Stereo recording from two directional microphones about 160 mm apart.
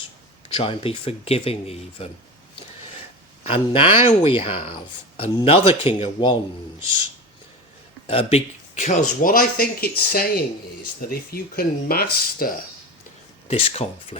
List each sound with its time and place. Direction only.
0.5 s speech: 35° left (ahead or behind)
3.4 s speech: 35° left (ahead or behind)
8.0 s a man's voice: 35° left (ahead or behind)
8.8 s speech: 50° left (ahead or behind); by 12.5 s 65° left (ahead or behind)
13.5 s speech: 40° left (ahead or behind)